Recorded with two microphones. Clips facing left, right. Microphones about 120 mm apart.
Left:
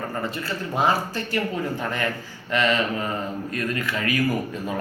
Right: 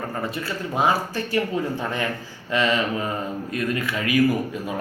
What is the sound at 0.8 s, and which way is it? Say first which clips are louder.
Speech: right 1 dB; 5° right (ahead or behind).